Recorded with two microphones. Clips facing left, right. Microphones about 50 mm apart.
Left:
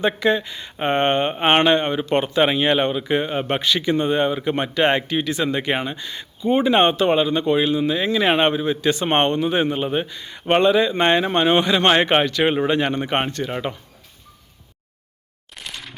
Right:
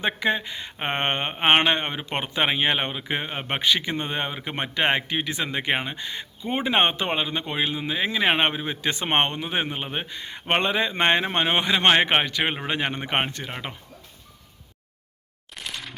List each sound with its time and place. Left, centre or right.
0.0 s speech: centre
10.1 s speech: right; by 13.7 s centre
15.5 s a sound: centre